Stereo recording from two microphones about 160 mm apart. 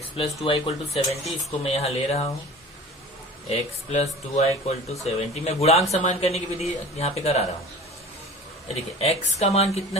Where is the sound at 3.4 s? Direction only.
45° left (ahead or behind).